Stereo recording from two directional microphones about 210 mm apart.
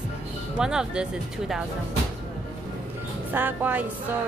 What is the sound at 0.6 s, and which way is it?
Speech, 5° right (ahead or behind).